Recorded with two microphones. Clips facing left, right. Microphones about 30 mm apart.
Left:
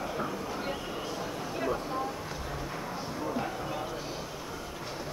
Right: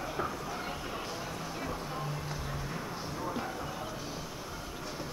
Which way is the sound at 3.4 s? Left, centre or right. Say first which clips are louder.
Left 3 dB; centre.